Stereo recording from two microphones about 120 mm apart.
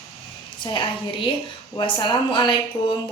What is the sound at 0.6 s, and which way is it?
A woman's voice, 40° left (ahead or behind).